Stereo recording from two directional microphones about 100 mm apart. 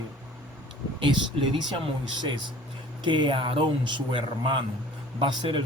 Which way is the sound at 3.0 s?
50° right (ahead or behind).